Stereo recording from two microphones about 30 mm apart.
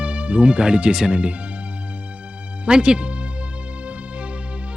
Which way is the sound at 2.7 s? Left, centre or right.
Right.